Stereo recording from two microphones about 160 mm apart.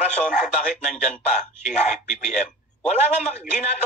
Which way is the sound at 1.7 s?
45° left (ahead or behind).